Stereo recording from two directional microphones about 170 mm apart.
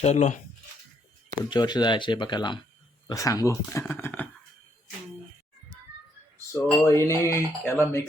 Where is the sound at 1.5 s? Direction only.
25° left (ahead or behind).